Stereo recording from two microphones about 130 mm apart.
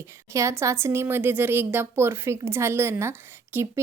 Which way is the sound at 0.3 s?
25° right (ahead or behind).